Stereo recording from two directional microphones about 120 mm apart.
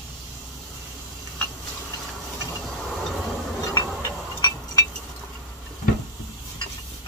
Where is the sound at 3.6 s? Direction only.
30° left (ahead or behind).